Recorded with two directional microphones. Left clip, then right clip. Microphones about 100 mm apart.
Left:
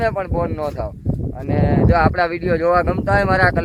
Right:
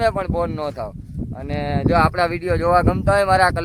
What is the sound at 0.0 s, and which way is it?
Speech, 25° right (ahead or behind).